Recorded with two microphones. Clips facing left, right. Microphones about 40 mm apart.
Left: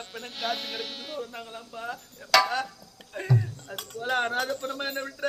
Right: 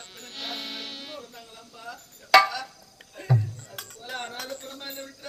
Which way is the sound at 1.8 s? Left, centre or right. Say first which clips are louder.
Left 6 dB; left.